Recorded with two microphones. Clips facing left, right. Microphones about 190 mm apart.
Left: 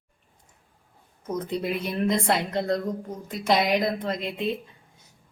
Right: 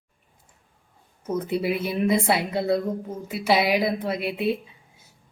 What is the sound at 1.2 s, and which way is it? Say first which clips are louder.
A woman's voice: right 3 dB; 5° right (ahead or behind).